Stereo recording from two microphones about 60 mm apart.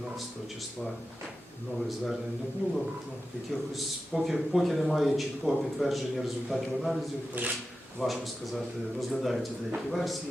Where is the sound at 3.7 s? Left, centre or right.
Centre.